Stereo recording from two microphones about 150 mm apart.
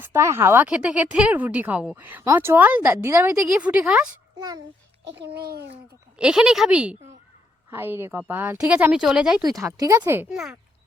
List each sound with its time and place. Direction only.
0.0 s a woman's voice: 20° right (ahead or behind)
4.4 s a child's voice: 25° right (ahead or behind)
5.2 s a child's voice: 90° right
6.1 s a woman's voice: 5° right (ahead or behind)
9.4 s speech: 20° right (ahead or behind)
10.2 s a woman's voice: 5° right (ahead or behind)